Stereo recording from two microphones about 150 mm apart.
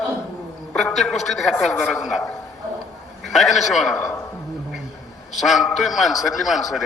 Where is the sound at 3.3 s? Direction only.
Centre (ahead or behind).